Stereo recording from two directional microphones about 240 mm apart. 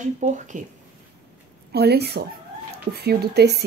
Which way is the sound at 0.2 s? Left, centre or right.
Right.